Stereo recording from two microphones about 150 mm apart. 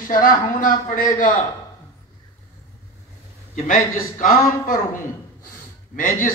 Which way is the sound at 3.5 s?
65° left (ahead or behind).